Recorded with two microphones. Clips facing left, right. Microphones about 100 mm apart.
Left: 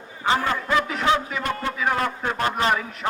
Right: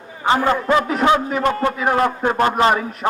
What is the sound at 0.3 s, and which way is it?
A man's voice, 50° right (ahead or behind).